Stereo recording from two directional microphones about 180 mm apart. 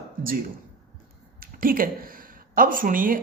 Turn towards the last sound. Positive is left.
turn(degrees=-50)  # may be behind; listen again after turning